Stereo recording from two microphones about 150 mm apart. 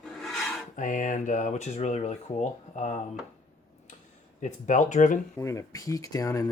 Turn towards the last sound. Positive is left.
turn(degrees=20)  # may be behind; listen again after turning